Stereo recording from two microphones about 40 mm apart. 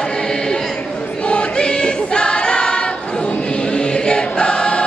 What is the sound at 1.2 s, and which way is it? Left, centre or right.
Choir, left.